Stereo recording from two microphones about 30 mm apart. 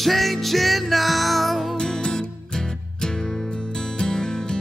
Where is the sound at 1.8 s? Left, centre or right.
Centre.